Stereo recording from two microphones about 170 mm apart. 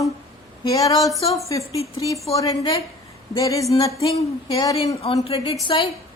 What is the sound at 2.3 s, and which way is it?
A woman's voice, 20° left (ahead or behind).